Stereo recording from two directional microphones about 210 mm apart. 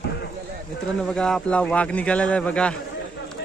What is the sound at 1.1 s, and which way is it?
A man's voice, 5° left (ahead or behind).